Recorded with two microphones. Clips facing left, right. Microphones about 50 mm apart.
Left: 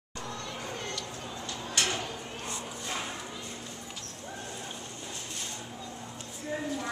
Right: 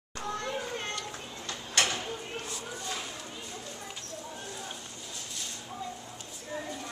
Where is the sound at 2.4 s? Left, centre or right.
Left.